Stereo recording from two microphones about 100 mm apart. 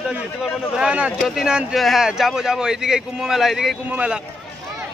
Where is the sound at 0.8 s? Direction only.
10° right (ahead or behind).